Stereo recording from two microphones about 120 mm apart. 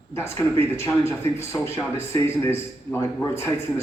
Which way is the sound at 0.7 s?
20° left (ahead or behind).